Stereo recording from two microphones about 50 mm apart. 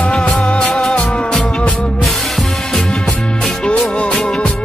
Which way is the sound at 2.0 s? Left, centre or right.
Centre.